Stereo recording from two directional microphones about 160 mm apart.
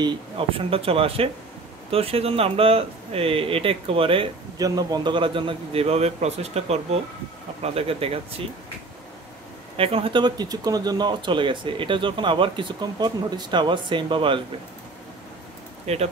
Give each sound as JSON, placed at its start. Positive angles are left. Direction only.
{"t": 0.0, "sound": "speech", "side_deg": -30}
{"t": 4.6, "sound": "speech", "side_deg": -25}
{"t": 9.8, "sound": "speech", "side_deg": -35}
{"t": 15.9, "sound": "speech", "side_deg": -40}